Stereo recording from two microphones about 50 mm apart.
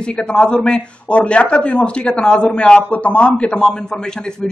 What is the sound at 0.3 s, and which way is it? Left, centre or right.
A man's voice, centre.